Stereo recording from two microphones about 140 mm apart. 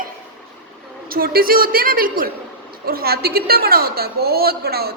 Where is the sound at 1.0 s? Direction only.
90° right.